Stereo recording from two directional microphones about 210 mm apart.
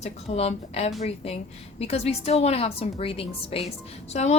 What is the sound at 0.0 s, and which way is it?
Speech, 30° left (ahead or behind).